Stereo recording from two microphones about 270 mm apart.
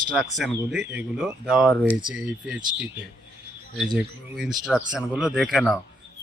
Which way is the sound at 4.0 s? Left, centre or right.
Centre.